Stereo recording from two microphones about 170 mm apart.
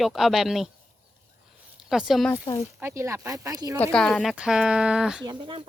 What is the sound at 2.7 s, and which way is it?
Speech, 15° right (ahead or behind).